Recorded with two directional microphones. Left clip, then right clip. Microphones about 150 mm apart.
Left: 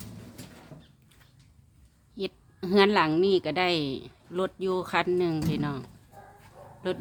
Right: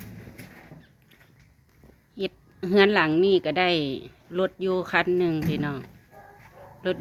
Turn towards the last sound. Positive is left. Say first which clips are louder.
# right 4 dB
turn(degrees=15)  # may be behind; listen again after turning